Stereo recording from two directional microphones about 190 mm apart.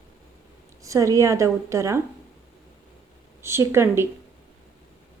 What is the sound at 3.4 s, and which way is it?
Speech, 15° right (ahead or behind).